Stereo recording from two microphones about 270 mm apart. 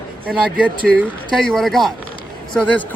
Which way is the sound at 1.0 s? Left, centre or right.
Centre.